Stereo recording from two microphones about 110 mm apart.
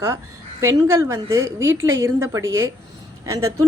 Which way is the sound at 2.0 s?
25° right (ahead or behind).